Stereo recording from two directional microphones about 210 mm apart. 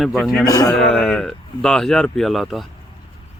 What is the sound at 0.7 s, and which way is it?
Speech, centre (ahead or behind).